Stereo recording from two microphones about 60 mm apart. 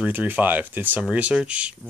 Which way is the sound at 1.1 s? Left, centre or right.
Right.